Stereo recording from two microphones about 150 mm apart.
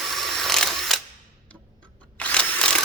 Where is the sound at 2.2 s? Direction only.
10° left (ahead or behind).